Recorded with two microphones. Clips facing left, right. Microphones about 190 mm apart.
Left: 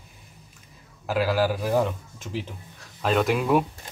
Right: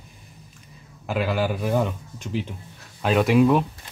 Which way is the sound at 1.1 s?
5° left (ahead or behind).